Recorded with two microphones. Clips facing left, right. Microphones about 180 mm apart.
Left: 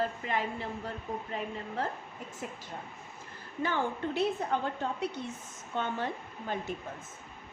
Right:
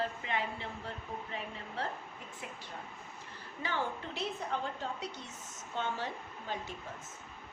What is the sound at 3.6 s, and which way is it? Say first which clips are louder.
Speech: left 5 dB; 50° left (ahead or behind).